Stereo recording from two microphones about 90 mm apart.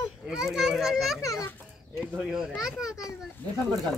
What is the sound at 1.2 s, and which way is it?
Speech, 35° left (ahead or behind).